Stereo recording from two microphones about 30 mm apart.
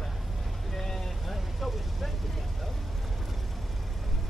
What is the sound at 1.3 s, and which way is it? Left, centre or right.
Vehicle, centre.